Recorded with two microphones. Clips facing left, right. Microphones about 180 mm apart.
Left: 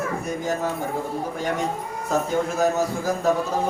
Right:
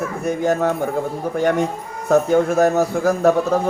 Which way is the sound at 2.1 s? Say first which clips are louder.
Right 8 dB; 60° right (ahead or behind).